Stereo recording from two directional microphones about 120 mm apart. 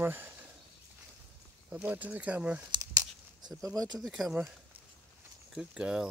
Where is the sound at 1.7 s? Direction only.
15° right (ahead or behind).